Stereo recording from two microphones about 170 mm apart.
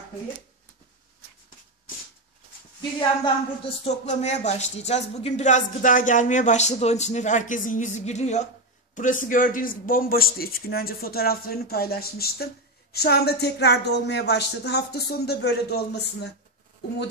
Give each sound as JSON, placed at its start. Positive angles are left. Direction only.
{"t": 3.6, "sound": "a man's voice", "side_deg": 40}